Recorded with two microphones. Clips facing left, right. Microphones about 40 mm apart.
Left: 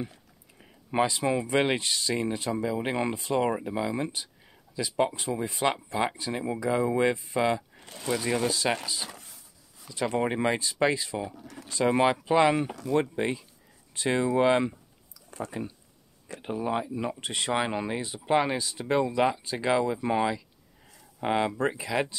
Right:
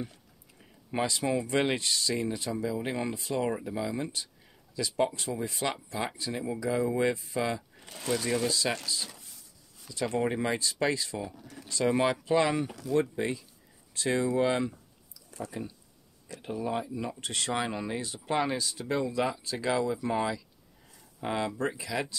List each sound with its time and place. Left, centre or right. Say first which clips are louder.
0.0 s speech: left 2 dB; left
8.0 s speech: left 1 dB; centre
8.3 s speech: left 4 dB; left